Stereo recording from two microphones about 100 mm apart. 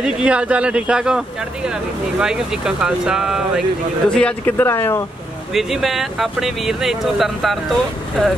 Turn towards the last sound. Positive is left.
turn(degrees=0)  # may be behind; listen again after turning